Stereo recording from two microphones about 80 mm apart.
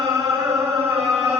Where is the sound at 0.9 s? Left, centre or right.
Centre.